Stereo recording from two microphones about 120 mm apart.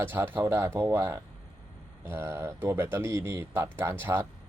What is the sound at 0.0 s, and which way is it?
Speech, 20° right (ahead or behind).